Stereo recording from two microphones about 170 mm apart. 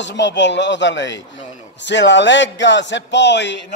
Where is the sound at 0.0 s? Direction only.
90° left.